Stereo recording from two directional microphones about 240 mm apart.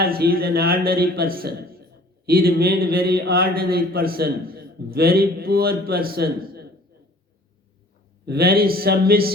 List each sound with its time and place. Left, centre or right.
0.0 s speech: right
8.2 s speech: right